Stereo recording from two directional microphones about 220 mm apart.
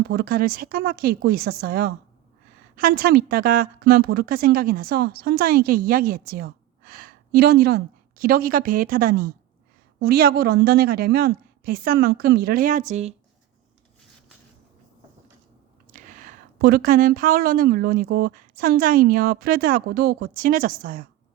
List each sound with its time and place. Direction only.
0.0 s a woman's voice: 45° right (ahead or behind)
15.9 s a woman's voice: 35° right (ahead or behind)